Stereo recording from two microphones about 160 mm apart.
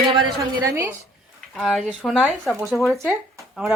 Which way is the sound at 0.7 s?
15° right (ahead or behind).